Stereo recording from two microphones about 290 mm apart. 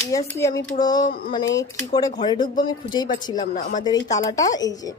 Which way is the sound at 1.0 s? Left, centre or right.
Left.